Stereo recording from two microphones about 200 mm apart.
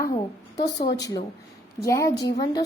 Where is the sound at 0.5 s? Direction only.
55° left (ahead or behind).